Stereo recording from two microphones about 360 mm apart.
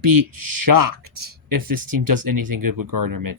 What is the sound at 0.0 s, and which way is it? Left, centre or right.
Speech, right.